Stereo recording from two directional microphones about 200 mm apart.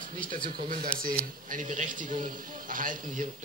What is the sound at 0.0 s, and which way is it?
Speech, 40° right (ahead or behind).